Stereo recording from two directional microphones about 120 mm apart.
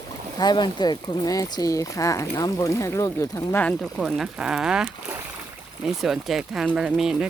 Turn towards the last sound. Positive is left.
turn(degrees=-5)  # may be behind; listen again after turning